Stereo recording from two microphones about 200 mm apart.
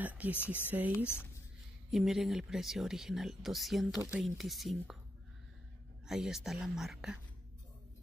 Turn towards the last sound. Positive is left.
turn(degrees=0)  # may be behind; listen again after turning